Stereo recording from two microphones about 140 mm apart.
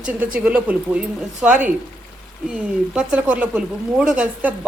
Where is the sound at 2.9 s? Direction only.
10° right (ahead or behind).